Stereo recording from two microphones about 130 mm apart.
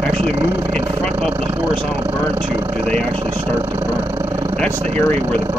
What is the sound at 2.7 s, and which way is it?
Speech, 55° right (ahead or behind).